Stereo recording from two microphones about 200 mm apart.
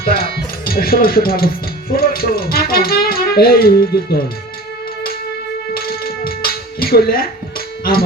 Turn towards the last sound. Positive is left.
turn(degrees=50)  # may be behind; listen again after turning